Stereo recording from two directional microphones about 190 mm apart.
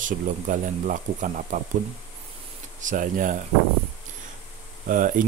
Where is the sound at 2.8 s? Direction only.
45° right (ahead or behind).